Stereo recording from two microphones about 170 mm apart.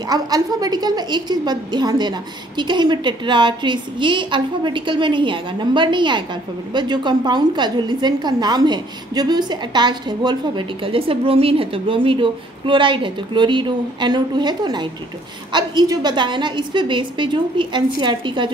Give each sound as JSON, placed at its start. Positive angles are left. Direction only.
{"t": 0.1, "sound": "a woman's voice", "side_deg": -20}